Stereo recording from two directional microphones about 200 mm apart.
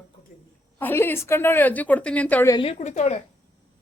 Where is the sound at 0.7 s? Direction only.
10° left (ahead or behind).